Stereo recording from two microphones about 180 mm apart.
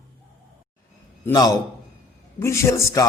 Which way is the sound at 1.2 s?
20° left (ahead or behind).